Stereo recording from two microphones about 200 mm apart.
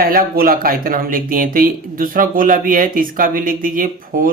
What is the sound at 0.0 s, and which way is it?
Speech, 45° right (ahead or behind).